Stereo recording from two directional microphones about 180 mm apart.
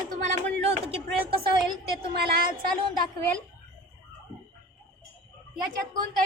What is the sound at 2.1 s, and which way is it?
Speech, 60° right (ahead or behind).